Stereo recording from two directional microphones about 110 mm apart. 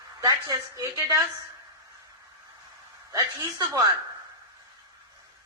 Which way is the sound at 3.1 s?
30° right (ahead or behind).